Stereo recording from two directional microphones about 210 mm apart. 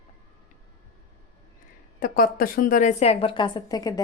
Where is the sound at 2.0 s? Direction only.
45° left (ahead or behind).